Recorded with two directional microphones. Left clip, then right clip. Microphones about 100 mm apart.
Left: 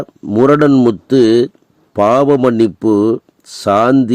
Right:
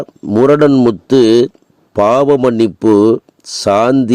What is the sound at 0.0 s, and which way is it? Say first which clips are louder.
A man's voice: right 1 dB; 30° right (ahead or behind).